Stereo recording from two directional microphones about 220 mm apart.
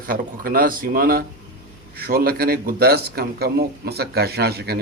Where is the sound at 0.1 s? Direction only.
40° right (ahead or behind).